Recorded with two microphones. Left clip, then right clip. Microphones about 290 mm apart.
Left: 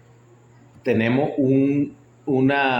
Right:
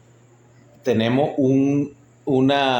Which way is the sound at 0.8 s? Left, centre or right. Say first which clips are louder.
Right 1 dB; centre.